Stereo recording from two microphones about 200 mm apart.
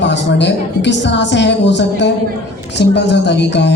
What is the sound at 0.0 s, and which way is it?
A man's voice, 60° left (ahead or behind).